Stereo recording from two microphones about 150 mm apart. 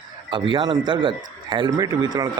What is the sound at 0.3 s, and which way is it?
A man's voice, 35° right (ahead or behind).